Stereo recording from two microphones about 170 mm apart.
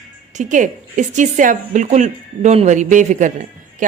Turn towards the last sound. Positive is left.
turn(degrees=-50)  # may be behind; listen again after turning